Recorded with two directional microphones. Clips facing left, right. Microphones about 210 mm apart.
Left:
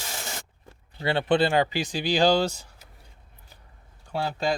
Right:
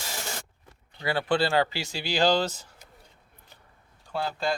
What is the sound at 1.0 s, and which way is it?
Speech, 25° left (ahead or behind).